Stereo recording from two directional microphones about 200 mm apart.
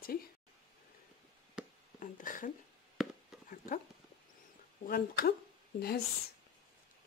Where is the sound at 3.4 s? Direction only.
45° left (ahead or behind).